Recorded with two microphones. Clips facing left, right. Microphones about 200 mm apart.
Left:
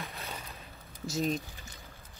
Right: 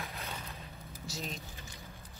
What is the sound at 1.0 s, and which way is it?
Speech, 50° left (ahead or behind).